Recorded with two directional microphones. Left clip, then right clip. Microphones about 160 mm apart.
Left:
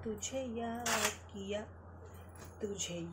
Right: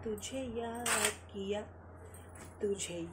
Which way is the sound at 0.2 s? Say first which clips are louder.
Even; 10° right (ahead or behind).